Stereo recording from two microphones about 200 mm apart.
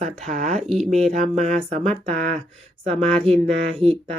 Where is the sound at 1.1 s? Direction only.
35° right (ahead or behind).